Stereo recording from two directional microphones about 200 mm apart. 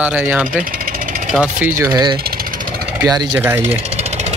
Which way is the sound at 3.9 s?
35° right (ahead or behind).